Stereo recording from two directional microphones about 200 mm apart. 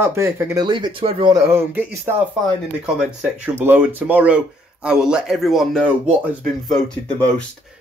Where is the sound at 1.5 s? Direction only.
10° right (ahead or behind).